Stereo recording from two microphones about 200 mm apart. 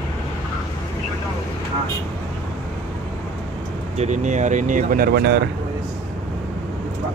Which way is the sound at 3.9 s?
35° right (ahead or behind).